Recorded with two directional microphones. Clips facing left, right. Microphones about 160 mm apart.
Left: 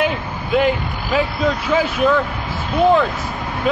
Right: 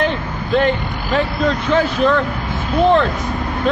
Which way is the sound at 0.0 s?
5° left (ahead or behind).